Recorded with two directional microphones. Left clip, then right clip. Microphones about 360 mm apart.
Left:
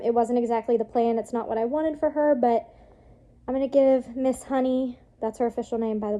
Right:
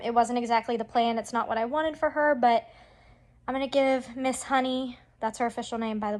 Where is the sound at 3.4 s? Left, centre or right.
Centre.